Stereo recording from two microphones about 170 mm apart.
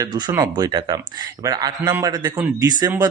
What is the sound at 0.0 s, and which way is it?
A man's voice, 20° right (ahead or behind).